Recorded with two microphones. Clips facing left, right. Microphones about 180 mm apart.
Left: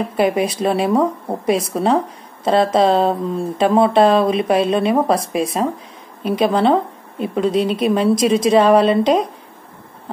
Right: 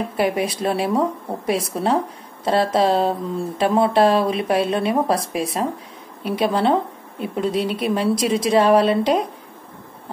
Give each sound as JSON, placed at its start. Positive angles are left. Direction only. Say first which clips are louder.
{"t": 0.2, "sound": "speech", "louder": "left 4 dB", "side_deg": 20}